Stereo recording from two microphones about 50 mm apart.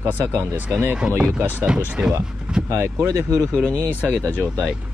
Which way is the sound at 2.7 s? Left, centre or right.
Right.